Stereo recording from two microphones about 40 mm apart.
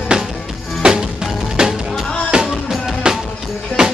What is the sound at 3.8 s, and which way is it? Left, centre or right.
Music, right.